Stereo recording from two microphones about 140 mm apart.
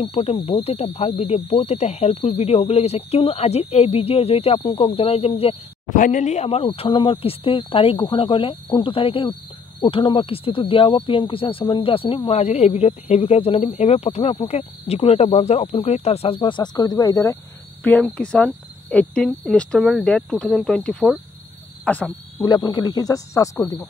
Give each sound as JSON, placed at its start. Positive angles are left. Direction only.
{"t": 0.0, "sound": "speech", "side_deg": 45}
{"t": 5.9, "sound": "speech", "side_deg": 65}
{"t": 12.3, "sound": "speech", "side_deg": 50}
{"t": 17.8, "sound": "speech", "side_deg": 10}
{"t": 22.4, "sound": "speech", "side_deg": 30}